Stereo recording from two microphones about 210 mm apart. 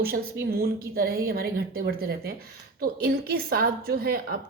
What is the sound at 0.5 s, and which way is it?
A woman's voice, 45° right (ahead or behind).